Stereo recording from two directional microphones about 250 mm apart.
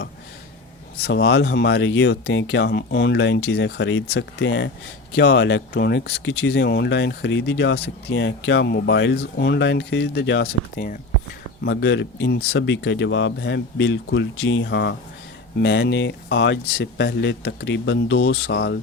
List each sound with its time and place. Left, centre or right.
1.0 s speech: left